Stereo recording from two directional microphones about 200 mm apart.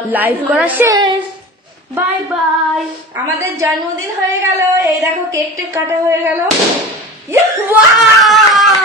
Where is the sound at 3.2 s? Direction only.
15° right (ahead or behind).